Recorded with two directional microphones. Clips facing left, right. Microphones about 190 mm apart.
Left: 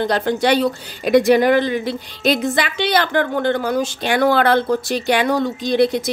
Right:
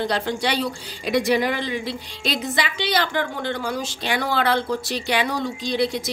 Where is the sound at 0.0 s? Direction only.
50° left (ahead or behind).